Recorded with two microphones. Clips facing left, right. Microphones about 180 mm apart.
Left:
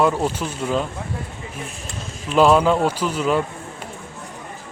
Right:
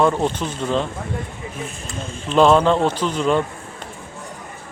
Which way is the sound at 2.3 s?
5° left (ahead or behind).